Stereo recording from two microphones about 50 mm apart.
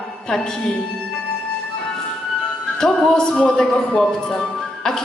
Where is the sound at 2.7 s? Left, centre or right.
Centre.